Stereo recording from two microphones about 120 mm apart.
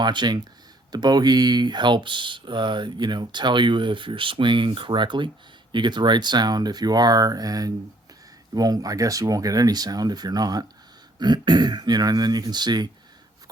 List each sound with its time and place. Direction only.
0.0 s speech: 40° right (ahead or behind)